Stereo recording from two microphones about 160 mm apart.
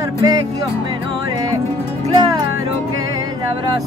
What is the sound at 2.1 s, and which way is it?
Music, 25° right (ahead or behind).